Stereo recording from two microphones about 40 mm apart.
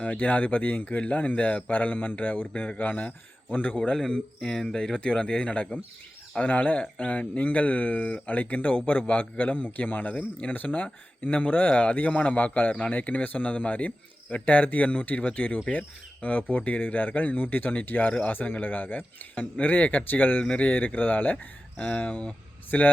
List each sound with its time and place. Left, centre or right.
0.0 s speech: left
3.9 s speech: centre
4.9 s speech: left
6.4 s speech: left
10.8 s speech: left
20.1 s speech: left
21.8 s speech: left